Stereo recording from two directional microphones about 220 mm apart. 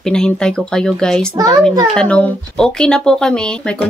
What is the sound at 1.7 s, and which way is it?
Speech, 15° right (ahead or behind).